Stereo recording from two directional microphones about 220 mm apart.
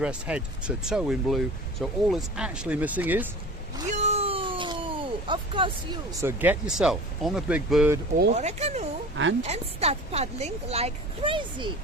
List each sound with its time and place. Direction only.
0.0 s speech: 5° right (ahead or behind)
3.8 s a sound: 30° right (ahead or behind)
6.2 s speech: 10° right (ahead or behind)
8.3 s a child's voice: 30° right (ahead or behind)